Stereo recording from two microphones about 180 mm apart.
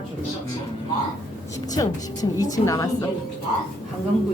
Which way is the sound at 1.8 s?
20° left (ahead or behind).